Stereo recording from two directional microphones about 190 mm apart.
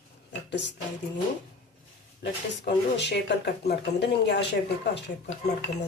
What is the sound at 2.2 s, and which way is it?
Speech, 65° left (ahead or behind).